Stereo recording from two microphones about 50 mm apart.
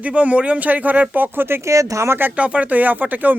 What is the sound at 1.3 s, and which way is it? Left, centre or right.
Speech, right.